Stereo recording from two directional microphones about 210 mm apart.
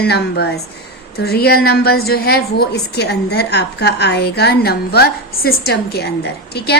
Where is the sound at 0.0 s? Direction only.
50° left (ahead or behind).